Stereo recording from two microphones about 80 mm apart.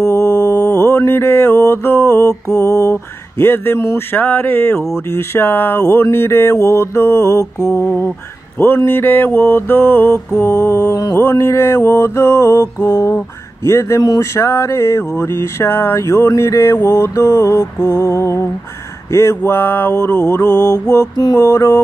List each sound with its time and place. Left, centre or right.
0.0 s mantra: left
2.5 s mantra: left
10.9 s mantra: left
11.1 s mantra: left